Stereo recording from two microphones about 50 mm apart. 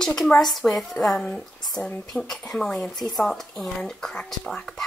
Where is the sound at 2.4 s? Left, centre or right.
Centre.